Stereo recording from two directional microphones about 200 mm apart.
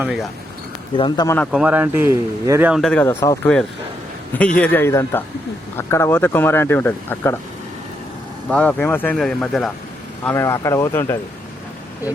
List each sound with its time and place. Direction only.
0.0 s speech: 5° right (ahead or behind)
0.9 s speech: 25° left (ahead or behind)
1.5 s speech: 5° right (ahead or behind); by 7.3 s 10° left (ahead or behind)
8.4 s speech: 5° left (ahead or behind)
10.2 s speech: 10° left (ahead or behind)